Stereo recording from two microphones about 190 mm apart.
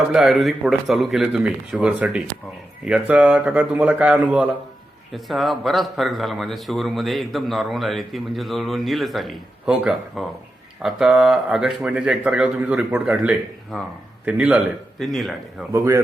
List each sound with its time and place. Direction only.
0.1 s speech: centre (ahead or behind)
15.7 s speech: 15° right (ahead or behind)